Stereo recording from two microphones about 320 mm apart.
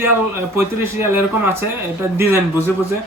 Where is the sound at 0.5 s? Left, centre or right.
Centre.